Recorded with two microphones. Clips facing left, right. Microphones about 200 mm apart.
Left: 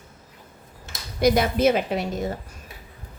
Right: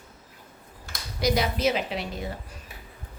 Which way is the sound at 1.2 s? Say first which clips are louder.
Left 6 dB; 55° left (ahead or behind).